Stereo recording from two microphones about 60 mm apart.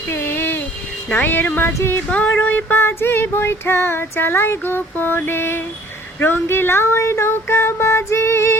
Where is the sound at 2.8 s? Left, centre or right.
Left.